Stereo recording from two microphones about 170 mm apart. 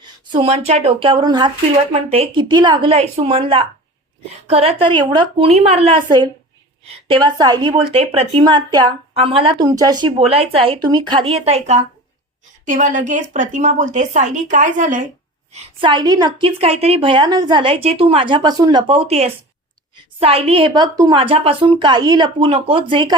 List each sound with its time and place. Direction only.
0.0 s a sound: 25° right (ahead or behind)
0.7 s a woman's voice: 40° right (ahead or behind)
1.9 s a woman's voice: 35° right (ahead or behind)
10.2 s a woman's voice: 35° right (ahead or behind)
15.5 s a woman's voice: 30° right (ahead or behind)
16.6 s a woman's voice: 35° right (ahead or behind)